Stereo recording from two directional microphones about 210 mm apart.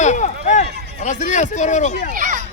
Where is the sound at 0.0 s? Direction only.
35° left (ahead or behind).